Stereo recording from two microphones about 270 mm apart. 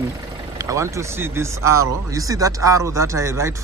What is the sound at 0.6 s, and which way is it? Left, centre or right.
Speech, centre.